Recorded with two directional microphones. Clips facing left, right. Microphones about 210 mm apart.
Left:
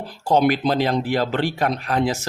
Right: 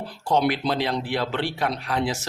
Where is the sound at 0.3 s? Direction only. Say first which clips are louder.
Left 4 dB; 45° left (ahead or behind).